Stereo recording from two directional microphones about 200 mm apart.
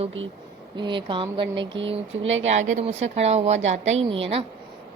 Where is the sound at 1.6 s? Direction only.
65° right (ahead or behind).